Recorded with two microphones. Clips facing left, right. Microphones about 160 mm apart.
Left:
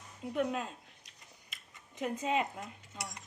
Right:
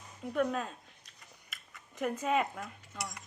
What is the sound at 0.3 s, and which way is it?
Scissors, 15° left (ahead or behind).